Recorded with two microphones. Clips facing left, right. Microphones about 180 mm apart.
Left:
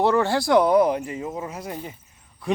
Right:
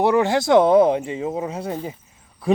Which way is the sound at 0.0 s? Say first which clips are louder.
Right 2 dB; 15° right (ahead or behind).